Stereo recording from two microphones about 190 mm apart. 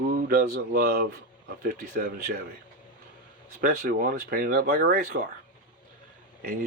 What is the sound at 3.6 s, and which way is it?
Speech, 50° right (ahead or behind).